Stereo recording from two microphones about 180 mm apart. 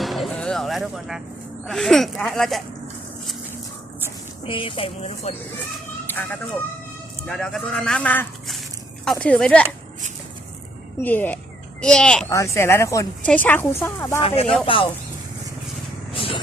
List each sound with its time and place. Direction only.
0.0 s music: centre (ahead or behind)
1.6 s speech: centre (ahead or behind)
4.4 s speech: 30° left (ahead or behind)
6.1 s speech: 10° left (ahead or behind)
11.0 s speech: 10° left (ahead or behind)
12.3 s speech: 15° left (ahead or behind)
14.2 s speech: 35° left (ahead or behind)
16.1 s vehicle: 30° left (ahead or behind)